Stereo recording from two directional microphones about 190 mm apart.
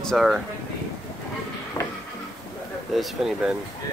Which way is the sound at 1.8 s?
10° left (ahead or behind).